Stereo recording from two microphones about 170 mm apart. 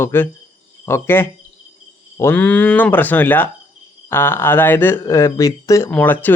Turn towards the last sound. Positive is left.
turn(degrees=10)  # may be behind; listen again after turning